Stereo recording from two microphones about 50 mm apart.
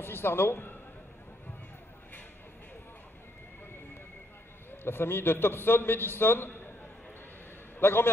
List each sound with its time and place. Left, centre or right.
0.0 s a man's voice: left
4.6 s a man's voice: left
7.8 s a man's voice: left